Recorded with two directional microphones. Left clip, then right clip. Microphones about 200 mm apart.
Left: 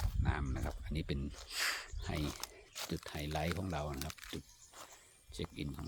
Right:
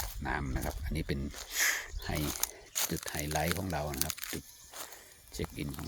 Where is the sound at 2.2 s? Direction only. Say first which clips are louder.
Right 7 dB; 60° right (ahead or behind).